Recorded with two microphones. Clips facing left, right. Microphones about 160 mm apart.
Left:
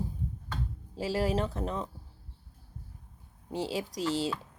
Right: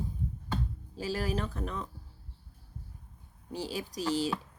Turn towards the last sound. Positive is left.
turn(degrees=25)  # may be behind; listen again after turning